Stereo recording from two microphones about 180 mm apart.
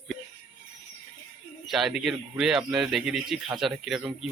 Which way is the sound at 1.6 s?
Centre (ahead or behind).